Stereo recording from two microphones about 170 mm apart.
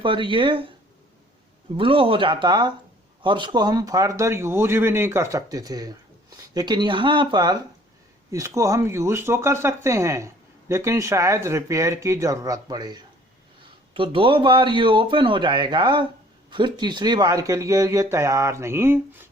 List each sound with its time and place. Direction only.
0.0 s speech: 30° right (ahead or behind)
1.7 s speech: 30° right (ahead or behind); by 19.3 s 15° right (ahead or behind)